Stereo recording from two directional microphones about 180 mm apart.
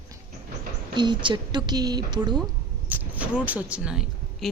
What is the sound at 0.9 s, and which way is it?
A woman's voice, 25° right (ahead or behind).